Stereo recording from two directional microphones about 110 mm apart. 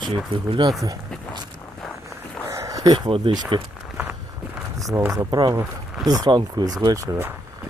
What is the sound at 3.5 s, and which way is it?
Speech, 50° right (ahead or behind).